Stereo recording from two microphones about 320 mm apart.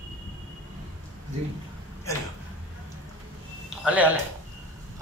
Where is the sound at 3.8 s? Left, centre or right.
Centre.